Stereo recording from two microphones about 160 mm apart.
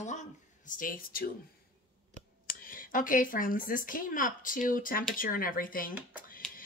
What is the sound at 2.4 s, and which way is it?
Speech, 60° left (ahead or behind).